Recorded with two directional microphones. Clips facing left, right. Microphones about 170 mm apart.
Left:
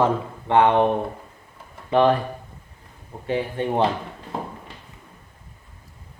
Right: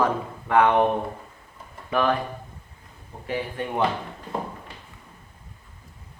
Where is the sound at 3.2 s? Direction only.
30° left (ahead or behind).